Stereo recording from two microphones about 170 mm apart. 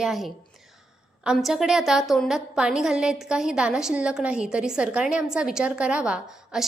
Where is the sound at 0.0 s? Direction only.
Centre (ahead or behind).